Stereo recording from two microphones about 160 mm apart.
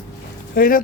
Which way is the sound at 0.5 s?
60° left (ahead or behind).